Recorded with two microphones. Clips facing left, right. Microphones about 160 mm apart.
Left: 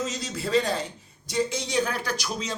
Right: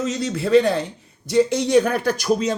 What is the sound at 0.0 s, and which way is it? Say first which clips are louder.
Speech: right 7 dB; 60° right (ahead or behind).